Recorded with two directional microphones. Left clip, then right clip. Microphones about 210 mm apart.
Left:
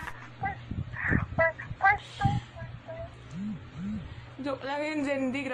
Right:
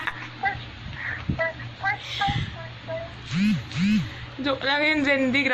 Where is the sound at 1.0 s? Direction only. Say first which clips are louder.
Left 1 dB; 40° left (ahead or behind).